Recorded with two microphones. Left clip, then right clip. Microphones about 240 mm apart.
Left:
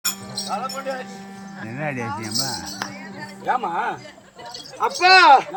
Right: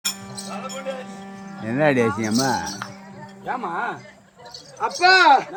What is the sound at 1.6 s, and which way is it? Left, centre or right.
Speech, right.